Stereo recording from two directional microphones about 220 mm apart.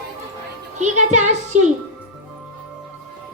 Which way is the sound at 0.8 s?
35° right (ahead or behind).